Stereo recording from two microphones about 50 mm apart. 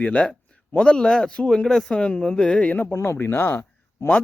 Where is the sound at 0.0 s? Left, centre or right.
Left.